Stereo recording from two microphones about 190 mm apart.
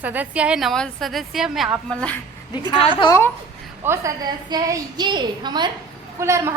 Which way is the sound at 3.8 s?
15° right (ahead or behind).